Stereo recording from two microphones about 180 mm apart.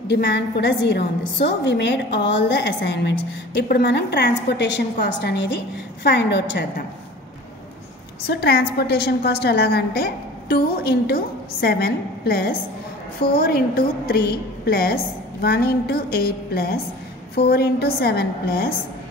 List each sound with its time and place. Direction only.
0.1 s a woman's voice: 80° left
8.3 s a woman's voice: 60° left (ahead or behind)